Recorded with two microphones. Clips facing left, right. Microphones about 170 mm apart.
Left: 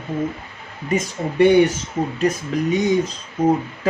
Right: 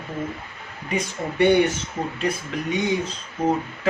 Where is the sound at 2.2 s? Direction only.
40° left (ahead or behind).